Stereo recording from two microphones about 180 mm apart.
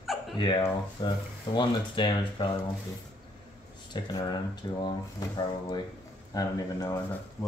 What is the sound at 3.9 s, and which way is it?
Speech, 25° left (ahead or behind).